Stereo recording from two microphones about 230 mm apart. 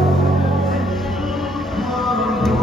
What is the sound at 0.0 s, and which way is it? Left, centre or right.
Music, centre.